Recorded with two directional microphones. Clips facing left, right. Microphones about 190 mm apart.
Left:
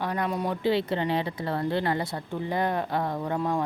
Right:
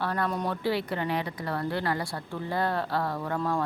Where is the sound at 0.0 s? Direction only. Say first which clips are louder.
Left 1 dB; 15° left (ahead or behind).